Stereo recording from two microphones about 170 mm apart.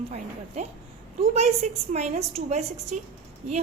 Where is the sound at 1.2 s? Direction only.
40° right (ahead or behind).